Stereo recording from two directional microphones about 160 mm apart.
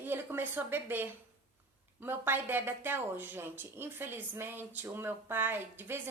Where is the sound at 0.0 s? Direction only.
15° right (ahead or behind).